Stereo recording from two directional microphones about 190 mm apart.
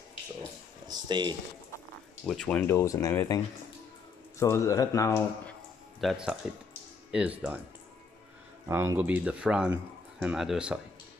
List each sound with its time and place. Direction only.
0.8 s speech: 25° right (ahead or behind)
2.2 s speech: 5° left (ahead or behind)
4.4 s speech: 15° left (ahead or behind)
5.9 s speech: centre (ahead or behind)
8.6 s speech: 15° right (ahead or behind)